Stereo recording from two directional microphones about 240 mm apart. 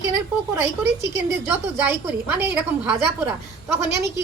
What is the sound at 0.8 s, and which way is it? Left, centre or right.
A woman's voice, centre.